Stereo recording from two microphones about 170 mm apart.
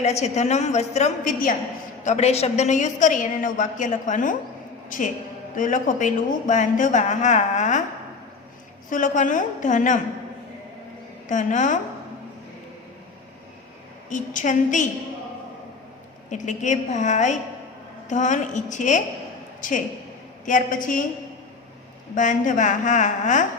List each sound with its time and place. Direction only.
0.0 s a woman's voice: 40° left (ahead or behind)
2.0 s a woman's voice: 40° left (ahead or behind)
8.9 s a woman's voice: 50° left (ahead or behind)
11.3 s a woman's voice: 45° left (ahead or behind)
14.1 s a woman's voice: 45° left (ahead or behind)
16.3 s a woman's voice: 45° left (ahead or behind)
20.4 s a woman's voice: 50° left (ahead or behind)
22.1 s a woman's voice: 50° left (ahead or behind)